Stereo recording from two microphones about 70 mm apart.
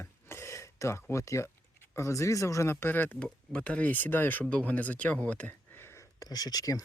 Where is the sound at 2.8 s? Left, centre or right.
Left.